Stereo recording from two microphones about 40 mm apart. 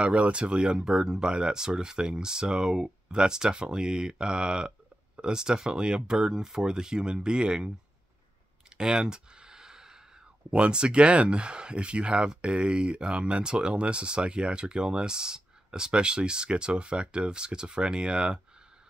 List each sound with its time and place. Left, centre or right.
0.0 s speech: right
8.7 s a sound: centre
10.5 s speech: right